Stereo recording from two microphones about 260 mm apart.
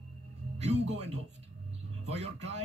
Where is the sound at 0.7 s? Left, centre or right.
Right.